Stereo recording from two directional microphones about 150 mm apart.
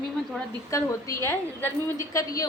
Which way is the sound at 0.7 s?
20° left (ahead or behind).